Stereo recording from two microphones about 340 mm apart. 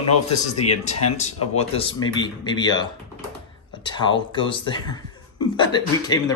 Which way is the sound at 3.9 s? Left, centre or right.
Centre.